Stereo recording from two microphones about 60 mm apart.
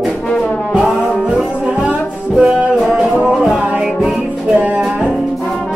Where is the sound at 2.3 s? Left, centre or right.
Centre.